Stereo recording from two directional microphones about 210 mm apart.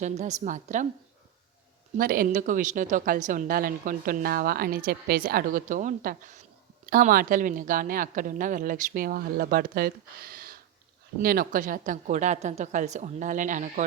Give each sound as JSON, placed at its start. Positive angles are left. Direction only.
{"t": 0.0, "sound": "a woman's voice", "side_deg": -35}
{"t": 2.0, "sound": "a woman's voice", "side_deg": -45}